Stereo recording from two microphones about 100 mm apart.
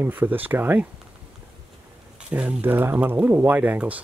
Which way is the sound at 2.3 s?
15° right (ahead or behind).